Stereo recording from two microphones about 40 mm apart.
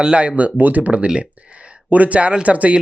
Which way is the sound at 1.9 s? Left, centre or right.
Right.